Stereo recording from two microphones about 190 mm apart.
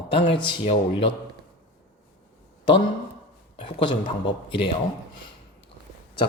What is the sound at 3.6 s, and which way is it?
Speech, 25° left (ahead or behind).